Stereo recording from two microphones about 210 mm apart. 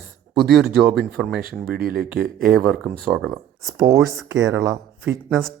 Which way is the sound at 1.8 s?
45° right (ahead or behind).